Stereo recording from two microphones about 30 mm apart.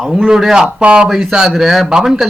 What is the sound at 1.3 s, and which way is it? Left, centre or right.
Speech, right.